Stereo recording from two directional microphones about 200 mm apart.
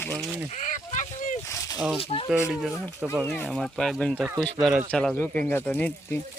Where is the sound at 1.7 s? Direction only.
5° right (ahead or behind).